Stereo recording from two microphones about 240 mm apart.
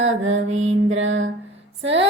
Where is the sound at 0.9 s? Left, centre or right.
Right.